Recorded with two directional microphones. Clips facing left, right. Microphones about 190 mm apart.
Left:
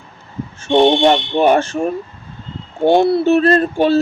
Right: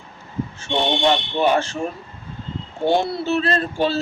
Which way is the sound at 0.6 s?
50° left (ahead or behind).